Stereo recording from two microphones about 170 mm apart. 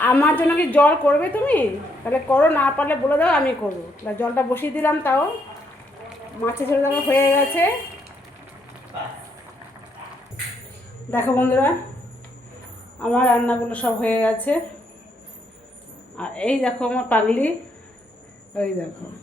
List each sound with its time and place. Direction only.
0.0 s a woman's voice: 10° left (ahead or behind)
6.4 s a woman's voice: 15° left (ahead or behind)
11.1 s a woman's voice: 10° left (ahead or behind)
13.0 s a woman's voice: 5° left (ahead or behind)
16.1 s a woman's voice: 5° left (ahead or behind)